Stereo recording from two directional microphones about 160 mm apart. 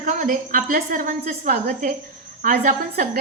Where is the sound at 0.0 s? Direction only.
55° right (ahead or behind).